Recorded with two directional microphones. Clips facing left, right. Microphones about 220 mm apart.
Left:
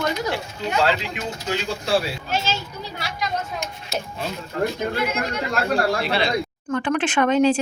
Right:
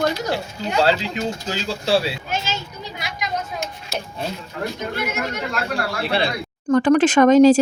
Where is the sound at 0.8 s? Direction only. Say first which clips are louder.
Right 4 dB; 35° right (ahead or behind).